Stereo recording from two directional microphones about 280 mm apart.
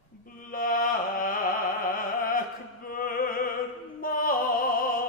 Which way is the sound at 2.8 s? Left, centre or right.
Left.